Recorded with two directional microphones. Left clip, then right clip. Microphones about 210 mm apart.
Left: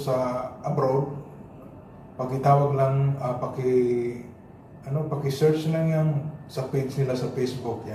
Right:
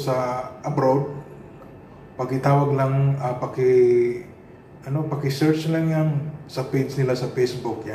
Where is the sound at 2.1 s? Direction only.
15° right (ahead or behind).